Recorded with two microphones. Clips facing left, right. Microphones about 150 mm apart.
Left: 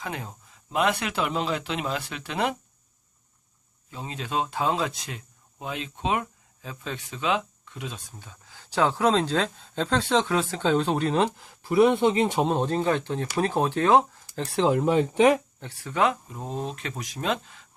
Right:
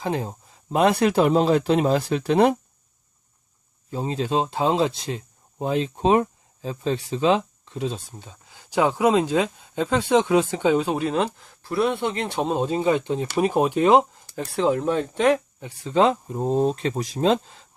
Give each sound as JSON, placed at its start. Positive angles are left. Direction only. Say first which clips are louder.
{"t": 0.0, "sound": "a man's voice", "louder": "right 9 dB", "side_deg": -30}
{"t": 3.9, "sound": "speech", "louder": "right 6 dB", "side_deg": -35}
{"t": 12.4, "sound": "speech", "louder": "right 1 dB", "side_deg": -5}
{"t": 14.4, "sound": "speech", "louder": "right 1 dB", "side_deg": 0}
{"t": 15.6, "sound": "a man's voice", "louder": "right 7 dB", "side_deg": -25}